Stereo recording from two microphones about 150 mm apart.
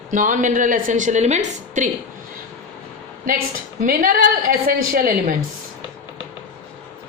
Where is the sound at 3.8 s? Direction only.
70° right (ahead or behind).